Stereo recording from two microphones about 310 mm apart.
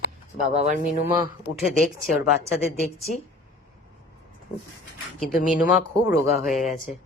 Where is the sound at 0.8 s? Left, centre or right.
Centre.